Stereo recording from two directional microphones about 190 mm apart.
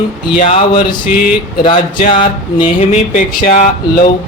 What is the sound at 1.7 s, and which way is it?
Speech, 40° left (ahead or behind).